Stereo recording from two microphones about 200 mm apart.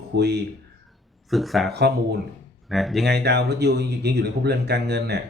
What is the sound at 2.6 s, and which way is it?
Speech, centre (ahead or behind).